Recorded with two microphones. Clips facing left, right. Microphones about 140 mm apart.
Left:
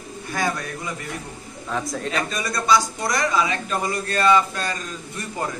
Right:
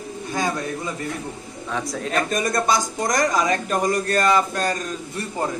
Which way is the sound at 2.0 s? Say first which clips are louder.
Right 3 dB; 50° right (ahead or behind).